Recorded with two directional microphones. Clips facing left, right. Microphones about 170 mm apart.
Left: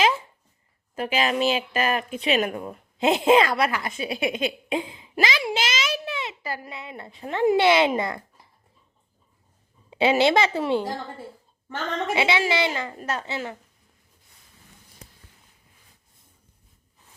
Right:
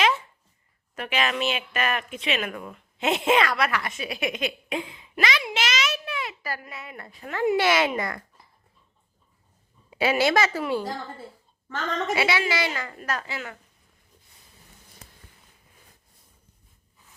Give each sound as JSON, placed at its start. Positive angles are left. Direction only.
{"t": 0.9, "sound": "speech", "side_deg": 30}
{"t": 5.4, "sound": "a sound", "side_deg": 30}
{"t": 6.7, "sound": "speech", "side_deg": 20}
{"t": 9.9, "sound": "speech", "side_deg": 25}
{"t": 12.1, "sound": "speech", "side_deg": 25}